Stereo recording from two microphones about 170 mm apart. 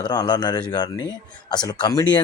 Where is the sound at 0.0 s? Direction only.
25° left (ahead or behind).